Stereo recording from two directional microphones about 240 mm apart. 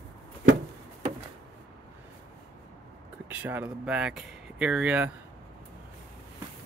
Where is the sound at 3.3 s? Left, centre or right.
Centre.